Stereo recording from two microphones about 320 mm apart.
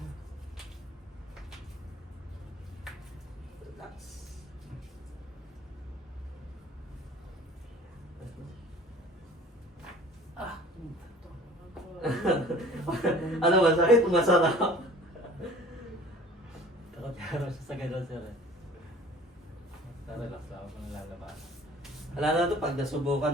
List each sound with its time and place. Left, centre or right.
12.0 s chuckle: centre
17.2 s a sound: centre
22.1 s speech: centre